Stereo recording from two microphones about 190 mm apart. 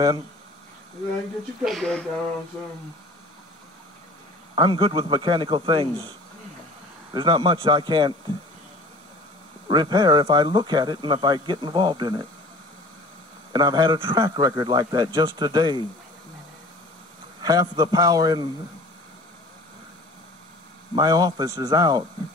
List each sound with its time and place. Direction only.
1.6 s speech: centre (ahead or behind)
4.6 s a man's voice: 25° right (ahead or behind)
7.1 s a man's voice: 25° right (ahead or behind)
9.7 s a man's voice: 25° right (ahead or behind)
13.5 s a man's voice: 25° right (ahead or behind)
17.4 s a man's voice: 20° right (ahead or behind)
20.9 s a man's voice: 20° right (ahead or behind)